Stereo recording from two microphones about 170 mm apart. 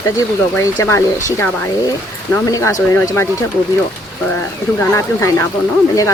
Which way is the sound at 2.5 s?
20° left (ahead or behind).